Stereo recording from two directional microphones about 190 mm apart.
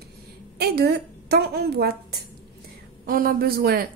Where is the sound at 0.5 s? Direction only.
55° right (ahead or behind).